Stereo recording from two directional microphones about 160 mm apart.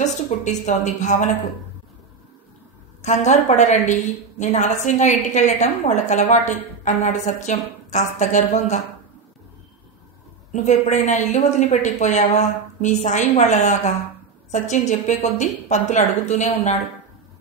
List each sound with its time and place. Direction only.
0.0 s a woman's voice: 50° left (ahead or behind)
3.0 s a woman's voice: 45° left (ahead or behind)
10.5 s a woman's voice: 50° left (ahead or behind)